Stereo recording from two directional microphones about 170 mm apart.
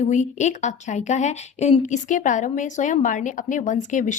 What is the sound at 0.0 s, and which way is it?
A woman's voice, 45° left (ahead or behind).